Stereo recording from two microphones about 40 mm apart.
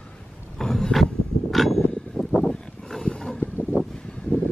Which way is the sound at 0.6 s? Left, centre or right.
Centre.